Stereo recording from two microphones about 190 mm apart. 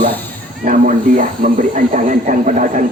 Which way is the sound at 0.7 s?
45° right (ahead or behind).